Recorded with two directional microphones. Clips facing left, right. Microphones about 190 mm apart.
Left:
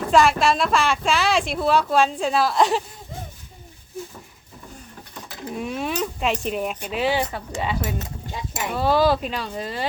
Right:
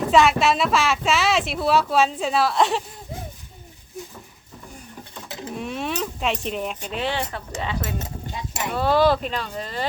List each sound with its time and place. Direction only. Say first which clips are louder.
0.1 s a woman's voice: left 1 dB; centre (ahead or behind)
5.5 s a woman's voice: left 2 dB; centre (ahead or behind)